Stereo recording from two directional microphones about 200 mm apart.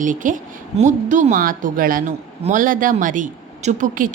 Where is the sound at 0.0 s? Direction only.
40° right (ahead or behind).